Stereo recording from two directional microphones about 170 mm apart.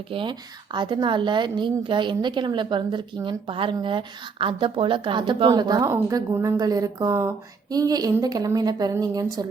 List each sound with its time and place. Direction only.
0.1 s a woman's voice: 30° right (ahead or behind)